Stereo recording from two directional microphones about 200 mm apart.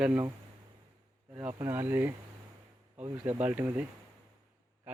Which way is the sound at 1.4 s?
10° right (ahead or behind).